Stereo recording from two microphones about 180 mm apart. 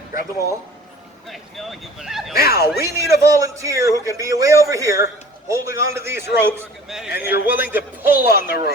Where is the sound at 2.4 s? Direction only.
60° left (ahead or behind).